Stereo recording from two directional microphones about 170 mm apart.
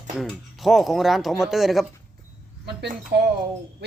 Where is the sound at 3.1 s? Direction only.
80° right.